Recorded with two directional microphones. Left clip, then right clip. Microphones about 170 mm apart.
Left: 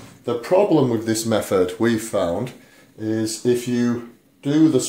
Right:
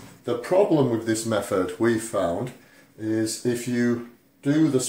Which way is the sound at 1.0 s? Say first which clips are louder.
Left 4 dB; 35° left (ahead or behind).